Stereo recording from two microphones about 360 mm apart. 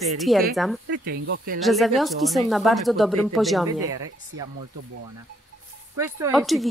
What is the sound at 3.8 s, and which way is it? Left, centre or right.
Speech, right.